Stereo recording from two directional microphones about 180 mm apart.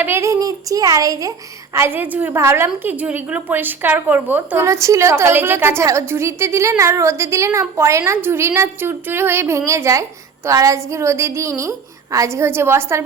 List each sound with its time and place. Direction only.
0.0 s a woman's voice: 15° right (ahead or behind)